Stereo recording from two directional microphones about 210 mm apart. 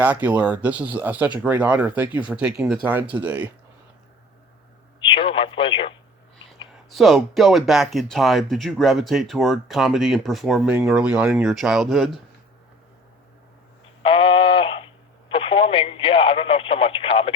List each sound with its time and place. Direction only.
0.0 s speech: 5° right (ahead or behind)
5.0 s speech: 25° left (ahead or behind)
6.9 s speech: centre (ahead or behind)
14.0 s a sound: 25° left (ahead or behind)
15.3 s radio: 25° left (ahead or behind)